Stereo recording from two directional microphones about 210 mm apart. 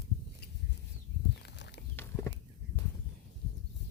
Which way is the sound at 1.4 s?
55° left (ahead or behind).